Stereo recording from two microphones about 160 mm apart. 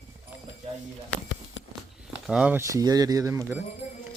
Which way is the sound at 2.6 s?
20° right (ahead or behind).